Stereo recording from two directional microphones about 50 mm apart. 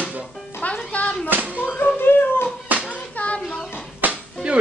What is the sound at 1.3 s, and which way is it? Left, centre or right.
Speech, right.